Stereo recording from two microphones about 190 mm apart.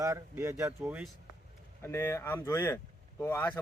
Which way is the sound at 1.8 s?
15° left (ahead or behind).